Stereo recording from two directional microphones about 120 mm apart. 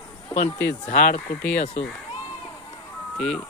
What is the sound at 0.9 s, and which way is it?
Speech, 70° left (ahead or behind).